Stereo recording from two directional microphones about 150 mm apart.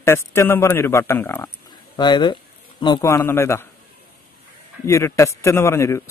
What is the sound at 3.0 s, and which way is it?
Speech, 15° left (ahead or behind).